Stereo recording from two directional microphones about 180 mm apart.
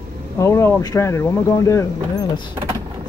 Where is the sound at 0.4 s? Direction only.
15° left (ahead or behind).